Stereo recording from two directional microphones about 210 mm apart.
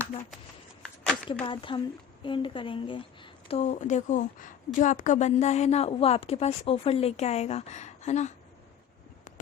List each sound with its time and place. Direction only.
1.3 s a woman's voice: 25° left (ahead or behind)